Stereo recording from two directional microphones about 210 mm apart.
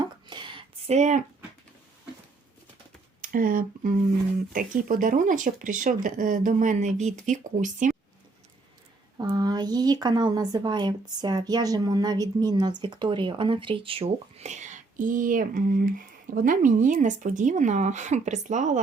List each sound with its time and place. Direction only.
0.0 s a sound: 20° right (ahead or behind)
3.2 s a woman's voice: 40° right (ahead or behind)
9.1 s a woman's voice: 20° right (ahead or behind); by 18.8 s 35° right (ahead or behind)